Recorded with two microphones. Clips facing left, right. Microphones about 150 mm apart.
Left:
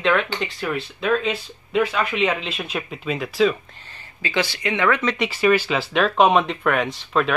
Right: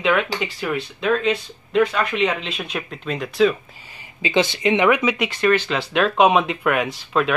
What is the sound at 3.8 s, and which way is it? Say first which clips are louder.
Speech: right 4 dB; 10° right (ahead or behind).